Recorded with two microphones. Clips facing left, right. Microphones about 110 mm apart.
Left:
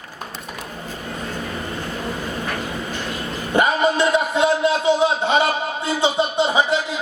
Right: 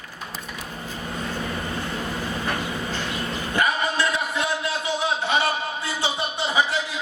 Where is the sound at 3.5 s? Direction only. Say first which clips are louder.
Left 6 dB; 20° left (ahead or behind).